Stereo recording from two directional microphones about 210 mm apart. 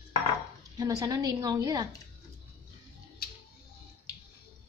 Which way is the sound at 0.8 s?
20° right (ahead or behind).